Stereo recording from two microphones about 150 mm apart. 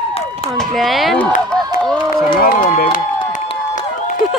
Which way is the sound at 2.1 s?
75° left (ahead or behind).